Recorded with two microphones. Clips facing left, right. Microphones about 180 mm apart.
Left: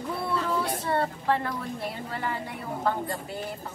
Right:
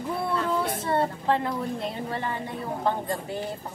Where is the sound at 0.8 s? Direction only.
20° right (ahead or behind).